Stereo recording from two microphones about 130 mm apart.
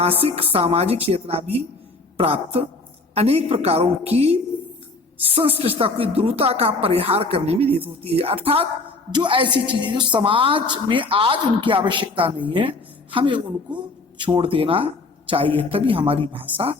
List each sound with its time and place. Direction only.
0.0 s speech: 50° right (ahead or behind)
5.3 s a woman's voice: 45° right (ahead or behind)